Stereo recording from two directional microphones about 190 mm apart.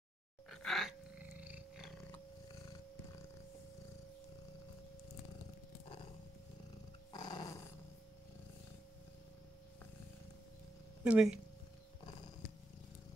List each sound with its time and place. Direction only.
0.5 s cat: centre (ahead or behind)
7.1 s dog: 20° left (ahead or behind)
11.1 s speech: 5° right (ahead or behind)